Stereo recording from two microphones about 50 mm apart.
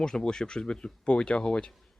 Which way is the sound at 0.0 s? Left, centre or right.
Centre.